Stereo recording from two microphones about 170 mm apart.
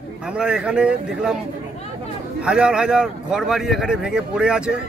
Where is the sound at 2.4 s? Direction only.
5° right (ahead or behind).